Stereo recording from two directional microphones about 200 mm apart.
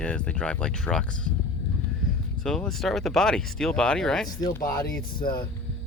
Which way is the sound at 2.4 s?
5° left (ahead or behind).